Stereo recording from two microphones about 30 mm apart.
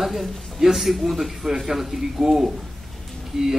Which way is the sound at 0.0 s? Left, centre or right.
Centre.